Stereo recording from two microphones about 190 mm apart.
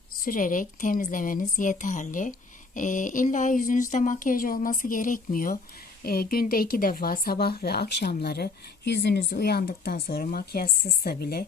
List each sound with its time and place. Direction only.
0.3 s speech: 45° left (ahead or behind)